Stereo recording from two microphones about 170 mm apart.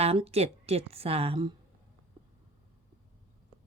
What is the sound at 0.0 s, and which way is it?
A woman's voice, 35° right (ahead or behind).